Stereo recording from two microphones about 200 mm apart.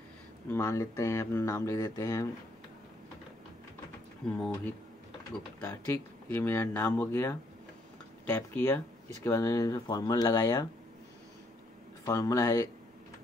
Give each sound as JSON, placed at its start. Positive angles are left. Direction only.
{"t": 0.5, "sound": "speech", "side_deg": 15}
{"t": 4.2, "sound": "speech", "side_deg": 0}
{"t": 5.6, "sound": "speech", "side_deg": 10}
{"t": 12.0, "sound": "speech", "side_deg": 15}